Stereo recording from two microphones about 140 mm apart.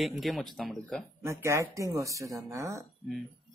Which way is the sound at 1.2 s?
20° right (ahead or behind).